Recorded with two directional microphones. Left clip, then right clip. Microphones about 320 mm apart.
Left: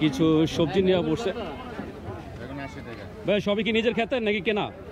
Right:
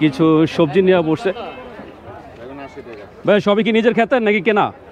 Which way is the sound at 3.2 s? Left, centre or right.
Right.